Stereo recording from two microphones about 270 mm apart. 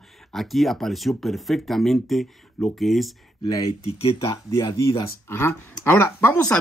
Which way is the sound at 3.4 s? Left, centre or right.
Centre.